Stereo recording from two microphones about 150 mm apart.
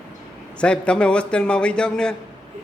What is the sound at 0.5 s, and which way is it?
A man's voice, 5° left (ahead or behind).